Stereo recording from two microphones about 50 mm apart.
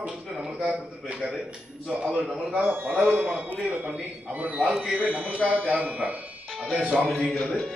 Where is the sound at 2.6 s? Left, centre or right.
Right.